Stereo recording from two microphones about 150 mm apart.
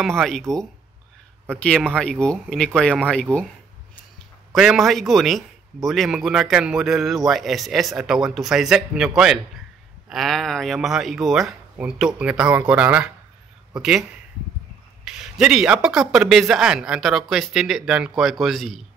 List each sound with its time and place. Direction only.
0.0 s a man's voice: 5° left (ahead or behind)
3.3 s speech: 20° right (ahead or behind)
4.5 s a man's voice: centre (ahead or behind)
15.0 s a man's voice: 5° right (ahead or behind)